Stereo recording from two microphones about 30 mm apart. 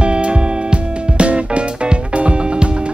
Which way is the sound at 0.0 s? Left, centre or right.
Right.